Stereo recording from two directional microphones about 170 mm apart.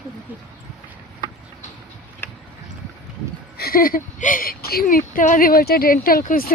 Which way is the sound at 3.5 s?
60° left (ahead or behind).